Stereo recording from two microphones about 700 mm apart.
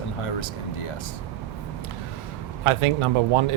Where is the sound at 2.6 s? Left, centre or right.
Right.